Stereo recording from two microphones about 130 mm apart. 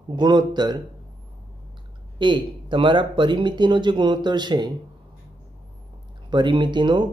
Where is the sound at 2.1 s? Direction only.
40° right (ahead or behind).